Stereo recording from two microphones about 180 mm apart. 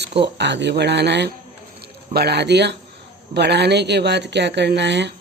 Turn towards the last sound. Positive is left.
turn(degrees=-75)  # may be behind; listen again after turning